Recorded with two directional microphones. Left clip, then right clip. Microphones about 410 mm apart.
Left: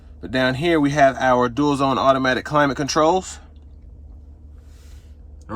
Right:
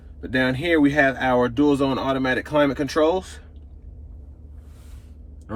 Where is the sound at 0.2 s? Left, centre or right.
Centre.